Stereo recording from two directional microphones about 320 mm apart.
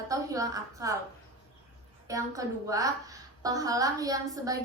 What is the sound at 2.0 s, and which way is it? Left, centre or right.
A woman's voice, centre.